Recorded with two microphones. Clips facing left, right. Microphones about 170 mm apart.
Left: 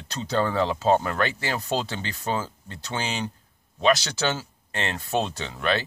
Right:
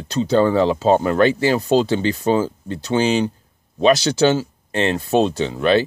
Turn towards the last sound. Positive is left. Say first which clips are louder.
# right 10 dB
turn(degrees=-25)  # may be behind; listen again after turning